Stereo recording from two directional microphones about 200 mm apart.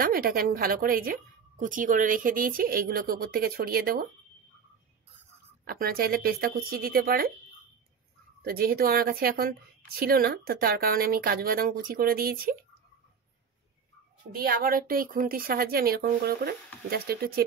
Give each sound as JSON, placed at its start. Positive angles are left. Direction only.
{"t": 0.0, "sound": "a woman's voice", "side_deg": -45}
{"t": 5.7, "sound": "a woman's voice", "side_deg": -45}
{"t": 8.5, "sound": "a woman's voice", "side_deg": -50}
{"t": 14.3, "sound": "a woman's voice", "side_deg": -45}